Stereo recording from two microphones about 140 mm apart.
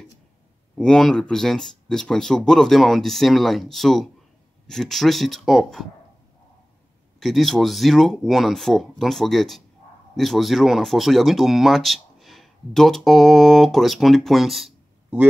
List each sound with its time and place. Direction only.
0.7 s speech: 5° left (ahead or behind)
7.2 s speech: centre (ahead or behind)